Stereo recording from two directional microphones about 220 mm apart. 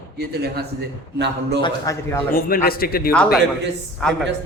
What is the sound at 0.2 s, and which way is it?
A man's voice, 45° right (ahead or behind).